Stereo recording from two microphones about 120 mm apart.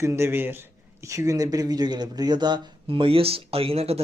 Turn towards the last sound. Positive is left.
turn(degrees=-55)  # may be behind; listen again after turning